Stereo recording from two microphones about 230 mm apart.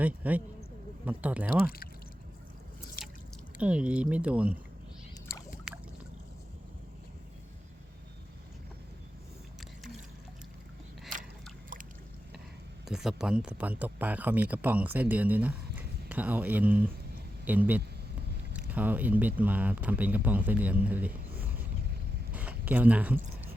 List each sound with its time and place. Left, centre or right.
0.0 s a man's voice: centre
3.0 s drip: left
3.6 s speech: centre
5.7 s a sound: centre
12.8 s speech: centre
20.8 s a sound: centre